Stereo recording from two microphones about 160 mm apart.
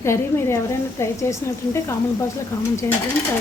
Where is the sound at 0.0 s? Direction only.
15° left (ahead or behind).